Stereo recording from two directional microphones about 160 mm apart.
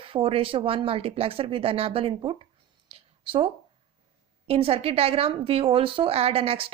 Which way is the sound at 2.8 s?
35° right (ahead or behind).